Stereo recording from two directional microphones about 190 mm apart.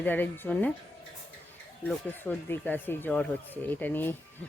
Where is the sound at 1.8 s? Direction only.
10° left (ahead or behind).